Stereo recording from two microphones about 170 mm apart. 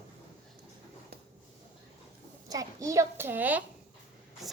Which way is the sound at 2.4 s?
20° right (ahead or behind).